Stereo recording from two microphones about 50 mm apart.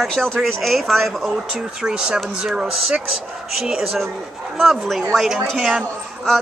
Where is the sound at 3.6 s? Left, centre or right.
Centre.